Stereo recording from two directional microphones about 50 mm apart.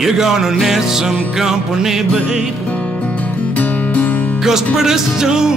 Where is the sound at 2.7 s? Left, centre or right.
Left.